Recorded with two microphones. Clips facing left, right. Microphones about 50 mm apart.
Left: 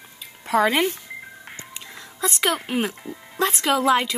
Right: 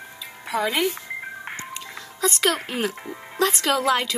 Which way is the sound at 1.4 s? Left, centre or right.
Right.